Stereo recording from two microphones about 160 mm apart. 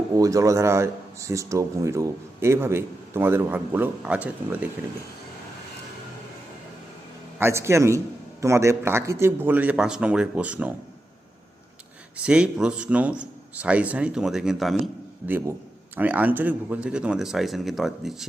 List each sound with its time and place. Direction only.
0.1 s speech: 20° right (ahead or behind)
7.3 s speech: 15° right (ahead or behind)
12.1 s speech: 5° right (ahead or behind)
15.3 s speech: 15° right (ahead or behind)